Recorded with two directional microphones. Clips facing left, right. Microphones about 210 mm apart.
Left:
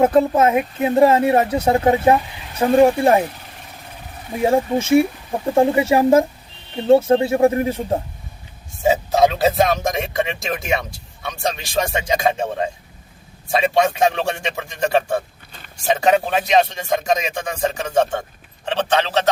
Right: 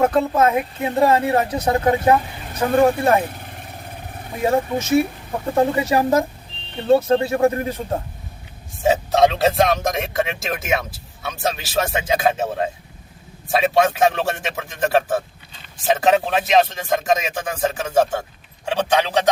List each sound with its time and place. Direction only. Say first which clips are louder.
0.3 s speech: left 2 dB; 25° left (ahead or behind)
4.4 s speech: left 2 dB; 25° left (ahead or behind)
8.8 s speech: even; centre (ahead or behind)